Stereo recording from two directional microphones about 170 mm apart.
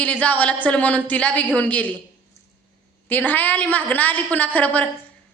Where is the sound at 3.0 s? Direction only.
10° left (ahead or behind).